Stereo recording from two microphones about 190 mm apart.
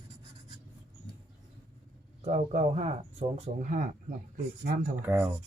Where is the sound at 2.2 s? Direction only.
35° right (ahead or behind); by 4.9 s 50° right (ahead or behind).